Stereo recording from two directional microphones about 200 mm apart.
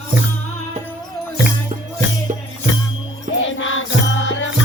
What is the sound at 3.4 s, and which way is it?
Music, 70° left (ahead or behind).